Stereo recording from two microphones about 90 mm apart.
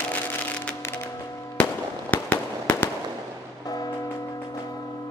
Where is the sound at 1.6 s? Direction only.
15° left (ahead or behind).